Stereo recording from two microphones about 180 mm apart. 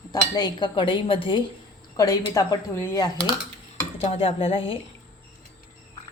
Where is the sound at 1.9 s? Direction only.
20° left (ahead or behind).